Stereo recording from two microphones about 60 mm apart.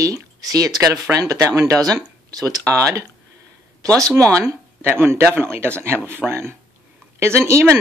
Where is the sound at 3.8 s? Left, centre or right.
Right.